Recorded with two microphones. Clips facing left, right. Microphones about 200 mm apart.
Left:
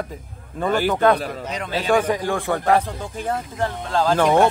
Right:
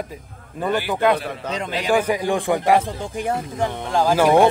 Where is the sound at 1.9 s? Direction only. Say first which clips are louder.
Right 1 dB; 10° right (ahead or behind).